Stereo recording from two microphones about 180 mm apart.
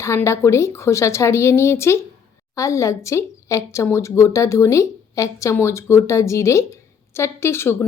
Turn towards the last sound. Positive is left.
turn(degrees=15)  # may be behind; listen again after turning